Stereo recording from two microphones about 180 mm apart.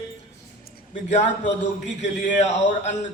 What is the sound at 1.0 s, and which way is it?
A man's voice, 40° left (ahead or behind).